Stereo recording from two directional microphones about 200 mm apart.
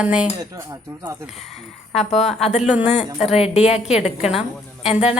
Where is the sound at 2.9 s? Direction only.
35° left (ahead or behind).